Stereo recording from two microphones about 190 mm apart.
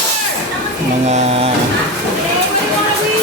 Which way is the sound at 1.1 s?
35° right (ahead or behind).